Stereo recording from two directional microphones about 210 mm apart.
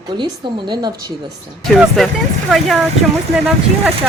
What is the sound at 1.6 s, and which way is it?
Speech, centre (ahead or behind).